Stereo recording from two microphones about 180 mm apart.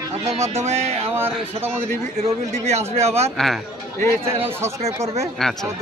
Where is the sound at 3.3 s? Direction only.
Centre (ahead or behind).